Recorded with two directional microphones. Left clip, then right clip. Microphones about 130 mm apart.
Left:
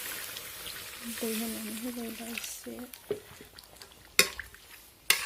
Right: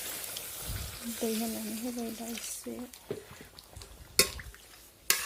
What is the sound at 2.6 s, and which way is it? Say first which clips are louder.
Speech: right 1 dB; 10° left (ahead or behind).